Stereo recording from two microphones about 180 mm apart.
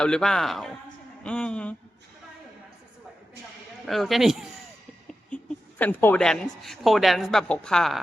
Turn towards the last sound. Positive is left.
turn(degrees=5)  # may be behind; listen again after turning